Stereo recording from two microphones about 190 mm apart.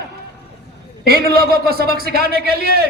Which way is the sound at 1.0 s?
55° right (ahead or behind).